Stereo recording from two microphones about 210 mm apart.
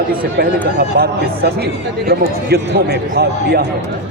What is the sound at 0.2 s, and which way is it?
Speech, 45° right (ahead or behind).